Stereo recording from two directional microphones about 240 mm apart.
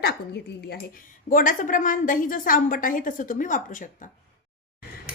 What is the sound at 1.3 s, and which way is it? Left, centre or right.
A woman's voice, left.